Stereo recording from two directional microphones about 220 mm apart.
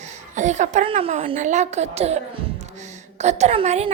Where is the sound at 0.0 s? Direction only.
35° right (ahead or behind).